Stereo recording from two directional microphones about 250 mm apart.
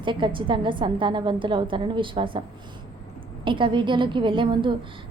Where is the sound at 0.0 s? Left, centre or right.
Centre.